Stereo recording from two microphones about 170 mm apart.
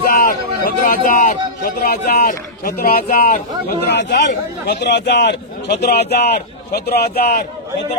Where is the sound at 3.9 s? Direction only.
90° left.